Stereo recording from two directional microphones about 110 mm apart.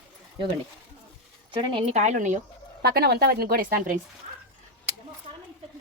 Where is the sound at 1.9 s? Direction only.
90° right.